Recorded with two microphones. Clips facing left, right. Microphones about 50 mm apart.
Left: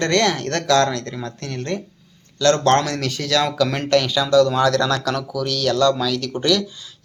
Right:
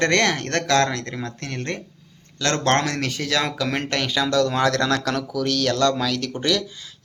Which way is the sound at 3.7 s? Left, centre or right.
Right.